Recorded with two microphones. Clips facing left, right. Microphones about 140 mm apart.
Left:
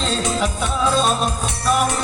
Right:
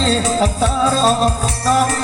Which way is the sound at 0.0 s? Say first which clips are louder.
Right 5 dB; 35° right (ahead or behind).